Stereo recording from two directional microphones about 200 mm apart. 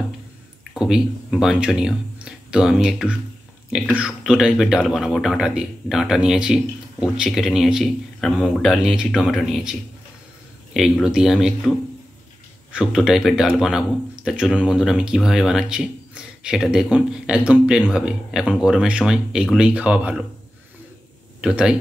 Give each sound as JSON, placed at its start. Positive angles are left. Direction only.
{"t": 0.7, "sound": "speech", "side_deg": -5}
{"t": 12.7, "sound": "speech", "side_deg": -5}
{"t": 21.4, "sound": "speech", "side_deg": -5}